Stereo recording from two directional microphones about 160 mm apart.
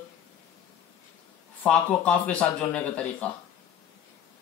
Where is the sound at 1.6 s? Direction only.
5° left (ahead or behind).